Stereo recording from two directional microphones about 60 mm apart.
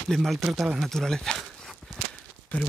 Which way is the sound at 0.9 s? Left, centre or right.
Centre.